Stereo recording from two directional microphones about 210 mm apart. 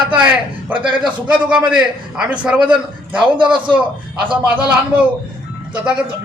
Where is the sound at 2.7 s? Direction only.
20° right (ahead or behind).